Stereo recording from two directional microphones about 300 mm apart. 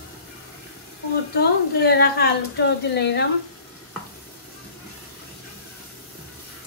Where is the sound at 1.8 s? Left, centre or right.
Left.